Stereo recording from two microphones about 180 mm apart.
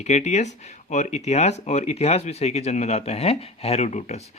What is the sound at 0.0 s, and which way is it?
Speech, 40° left (ahead or behind).